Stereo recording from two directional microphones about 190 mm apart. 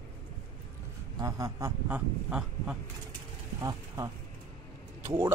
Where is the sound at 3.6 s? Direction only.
15° right (ahead or behind).